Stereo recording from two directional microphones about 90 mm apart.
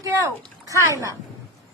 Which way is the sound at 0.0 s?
35° right (ahead or behind).